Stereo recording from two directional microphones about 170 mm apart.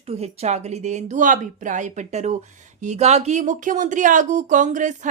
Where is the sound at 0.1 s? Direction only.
40° right (ahead or behind).